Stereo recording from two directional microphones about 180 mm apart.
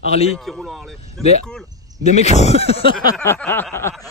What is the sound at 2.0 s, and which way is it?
Speech, 40° left (ahead or behind).